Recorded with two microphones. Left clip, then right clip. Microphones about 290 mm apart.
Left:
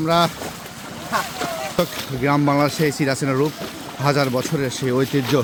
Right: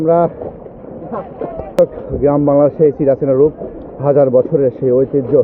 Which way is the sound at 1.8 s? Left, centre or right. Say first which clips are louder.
Right 11 dB; centre.